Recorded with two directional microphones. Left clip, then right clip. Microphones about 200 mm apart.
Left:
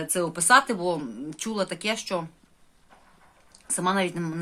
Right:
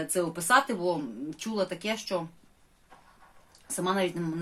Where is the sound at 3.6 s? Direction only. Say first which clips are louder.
Left 3 dB; 30° left (ahead or behind).